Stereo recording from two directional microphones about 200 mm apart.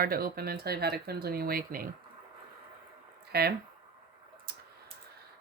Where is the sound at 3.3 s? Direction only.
50° right (ahead or behind).